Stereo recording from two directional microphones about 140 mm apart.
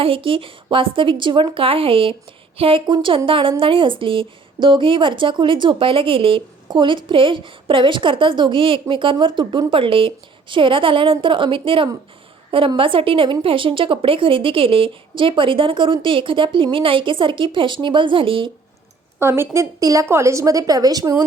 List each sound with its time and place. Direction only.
0.0 s a woman's voice: 40° right (ahead or behind)
19.2 s a woman's voice: 20° right (ahead or behind)